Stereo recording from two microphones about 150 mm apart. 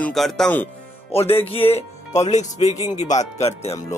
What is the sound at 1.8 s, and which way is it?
Speech, 50° left (ahead or behind).